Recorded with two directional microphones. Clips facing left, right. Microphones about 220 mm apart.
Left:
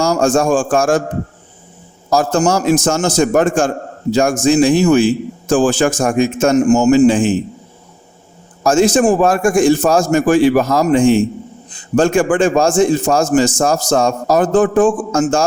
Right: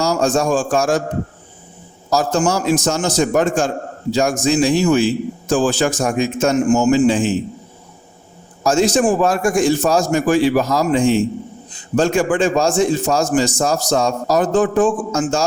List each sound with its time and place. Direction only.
0.0 s a man's voice: 50° left (ahead or behind)
2.0 s a man's voice: 50° left (ahead or behind)
8.6 s a man's voice: 50° left (ahead or behind)